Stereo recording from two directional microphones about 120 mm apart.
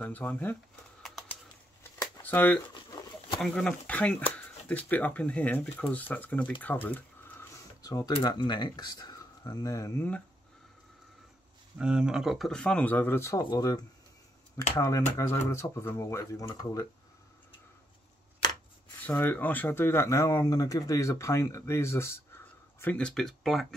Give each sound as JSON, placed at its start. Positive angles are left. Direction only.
{"t": 0.0, "sound": "speech", "side_deg": 15}
{"t": 2.2, "sound": "speech", "side_deg": 15}
{"t": 2.7, "sound": "pigeon", "side_deg": 40}
{"t": 3.3, "sound": "speech", "side_deg": 5}
{"t": 6.6, "sound": "a sound", "side_deg": 15}
{"t": 7.5, "sound": "a sound", "side_deg": 30}
{"t": 8.2, "sound": "speech", "side_deg": 35}
{"t": 11.8, "sound": "speech", "side_deg": -5}
{"t": 14.8, "sound": "speech", "side_deg": 30}
{"t": 19.0, "sound": "speech", "side_deg": 15}
{"t": 22.9, "sound": "speech", "side_deg": 5}